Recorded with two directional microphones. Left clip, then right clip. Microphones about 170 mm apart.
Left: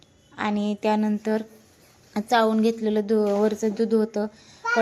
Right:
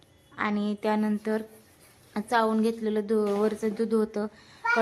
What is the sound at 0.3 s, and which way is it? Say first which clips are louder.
A woman's voice: left 3 dB; 5° left (ahead or behind).